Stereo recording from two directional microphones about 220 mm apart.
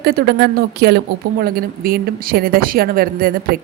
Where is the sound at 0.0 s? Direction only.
45° right (ahead or behind).